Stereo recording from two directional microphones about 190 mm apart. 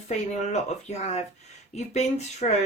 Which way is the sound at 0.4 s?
35° left (ahead or behind).